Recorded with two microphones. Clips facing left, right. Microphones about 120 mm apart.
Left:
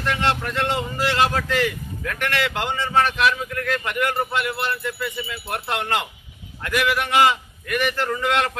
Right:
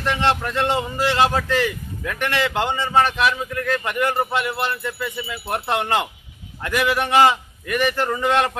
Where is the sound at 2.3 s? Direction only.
25° right (ahead or behind).